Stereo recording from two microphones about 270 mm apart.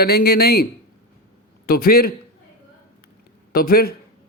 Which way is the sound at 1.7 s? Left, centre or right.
Left.